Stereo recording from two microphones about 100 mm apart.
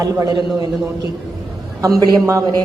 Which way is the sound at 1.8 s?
35° right (ahead or behind).